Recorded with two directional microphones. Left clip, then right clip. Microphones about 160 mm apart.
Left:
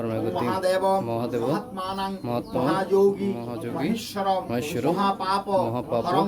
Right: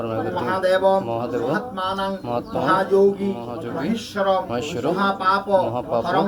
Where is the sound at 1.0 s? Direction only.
30° left (ahead or behind).